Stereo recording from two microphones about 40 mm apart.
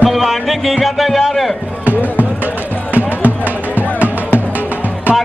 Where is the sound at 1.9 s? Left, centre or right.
Right.